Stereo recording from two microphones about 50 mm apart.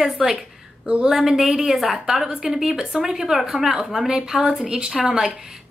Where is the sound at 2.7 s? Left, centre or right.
Centre.